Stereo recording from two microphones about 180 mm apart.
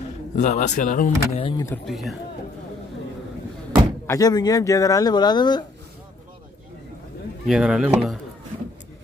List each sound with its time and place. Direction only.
0.4 s speech: 45° left (ahead or behind)
1.4 s speech: 25° left (ahead or behind)
1.9 s speech: centre (ahead or behind)
4.1 s speech: 20° left (ahead or behind)
7.4 s speech: 5° right (ahead or behind)